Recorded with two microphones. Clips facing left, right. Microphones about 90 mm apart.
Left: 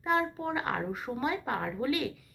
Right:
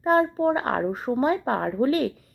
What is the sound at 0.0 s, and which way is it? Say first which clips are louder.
Speech: right 9 dB; 40° right (ahead or behind).